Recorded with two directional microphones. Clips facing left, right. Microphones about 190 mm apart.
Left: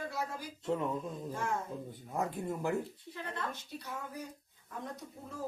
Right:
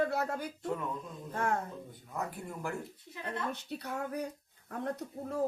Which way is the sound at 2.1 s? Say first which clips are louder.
Left 4 dB; 20° left (ahead or behind).